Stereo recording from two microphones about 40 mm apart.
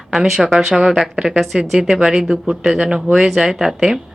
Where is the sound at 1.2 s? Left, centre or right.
Right.